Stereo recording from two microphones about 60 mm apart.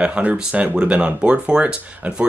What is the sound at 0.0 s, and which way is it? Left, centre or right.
Speech, centre.